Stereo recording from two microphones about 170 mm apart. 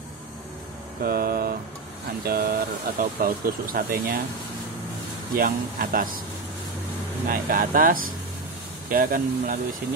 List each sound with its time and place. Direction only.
1.0 s speech: 60° right (ahead or behind)
5.3 s speech: 55° right (ahead or behind)
7.2 s speech: 55° right (ahead or behind)